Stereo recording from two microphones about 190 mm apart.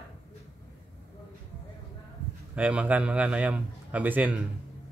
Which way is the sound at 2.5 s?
5° right (ahead or behind).